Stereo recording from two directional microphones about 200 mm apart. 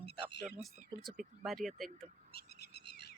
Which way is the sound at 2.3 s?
55° left (ahead or behind).